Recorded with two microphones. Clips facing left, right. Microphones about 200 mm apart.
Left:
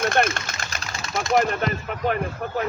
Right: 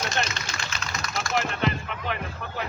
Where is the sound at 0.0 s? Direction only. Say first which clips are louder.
Left 8 dB; 55° left (ahead or behind).